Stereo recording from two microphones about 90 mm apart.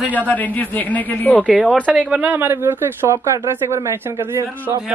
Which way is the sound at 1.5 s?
10° right (ahead or behind).